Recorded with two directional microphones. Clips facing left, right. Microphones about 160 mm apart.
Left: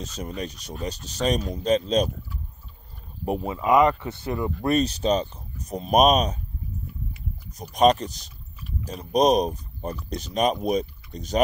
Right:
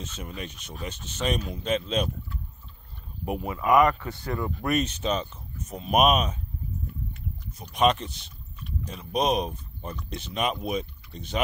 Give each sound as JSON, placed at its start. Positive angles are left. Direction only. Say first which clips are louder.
{"t": 0.0, "sound": "speech", "louder": "left 5 dB", "side_deg": 40}
{"t": 3.3, "sound": "speech", "louder": "left 4 dB", "side_deg": 35}
{"t": 3.5, "sound": "speech", "louder": "left 1 dB", "side_deg": 25}
{"t": 4.6, "sound": "speech", "louder": "left 5 dB", "side_deg": 35}
{"t": 7.7, "sound": "speech", "louder": "left 4 dB", "side_deg": 40}